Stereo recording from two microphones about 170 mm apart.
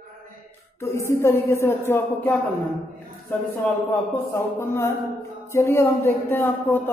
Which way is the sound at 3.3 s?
10° left (ahead or behind).